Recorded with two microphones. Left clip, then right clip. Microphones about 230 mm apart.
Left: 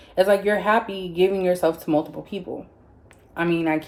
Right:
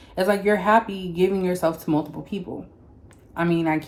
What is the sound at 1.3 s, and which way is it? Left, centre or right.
Speech, right.